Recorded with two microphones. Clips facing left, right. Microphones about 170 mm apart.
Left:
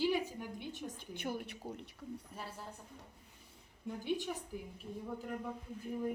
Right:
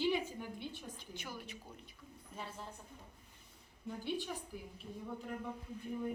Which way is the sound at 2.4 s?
5° left (ahead or behind).